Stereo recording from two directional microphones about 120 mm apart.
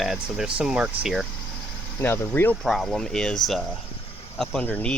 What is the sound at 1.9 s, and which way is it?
Speech, 20° left (ahead or behind).